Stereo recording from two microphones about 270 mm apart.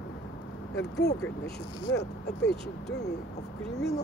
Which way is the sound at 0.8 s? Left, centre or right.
Left.